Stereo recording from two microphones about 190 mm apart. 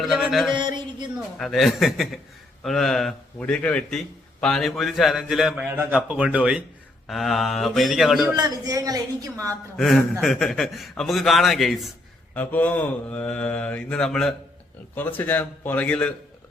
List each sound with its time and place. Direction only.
0.0 s a man's voice: centre (ahead or behind)
0.5 s a sound: 25° right (ahead or behind)
1.4 s a man's voice: centre (ahead or behind)
8.3 s a man's voice: 20° right (ahead or behind)
9.7 s a man's voice: centre (ahead or behind)
12.3 s mantra: 10° left (ahead or behind)